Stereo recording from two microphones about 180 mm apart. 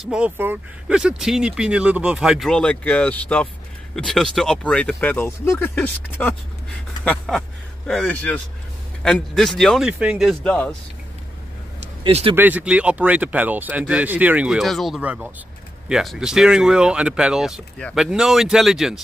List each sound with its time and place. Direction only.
0.0 s speech: 5° right (ahead or behind)
12.0 s speech: 30° right (ahead or behind)
12.4 s speech: 10° right (ahead or behind)